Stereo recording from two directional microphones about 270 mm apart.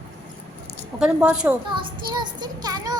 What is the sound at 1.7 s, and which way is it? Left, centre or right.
Child singing, centre.